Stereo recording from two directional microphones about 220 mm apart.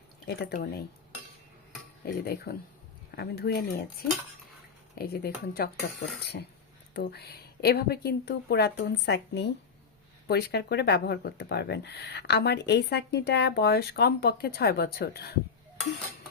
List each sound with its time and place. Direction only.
0.3 s speech: 45° left (ahead or behind)
2.0 s speech: 45° left (ahead or behind)
4.9 s speech: 45° left (ahead or behind)